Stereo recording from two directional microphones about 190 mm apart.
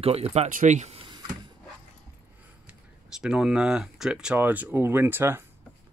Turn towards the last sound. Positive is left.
turn(degrees=-10)  # may be behind; listen again after turning